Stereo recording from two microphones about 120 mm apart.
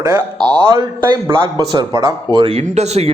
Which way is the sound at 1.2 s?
45° right (ahead or behind).